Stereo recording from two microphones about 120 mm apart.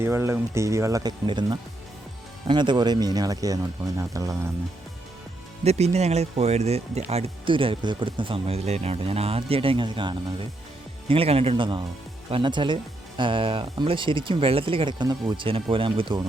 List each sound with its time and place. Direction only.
0.0 s speech: 20° right (ahead or behind)
1.3 s speech: 40° right (ahead or behind)
5.6 s speech: 65° right (ahead or behind)
7.1 s speech: 50° right (ahead or behind)
11.1 s speech: 55° right (ahead or behind)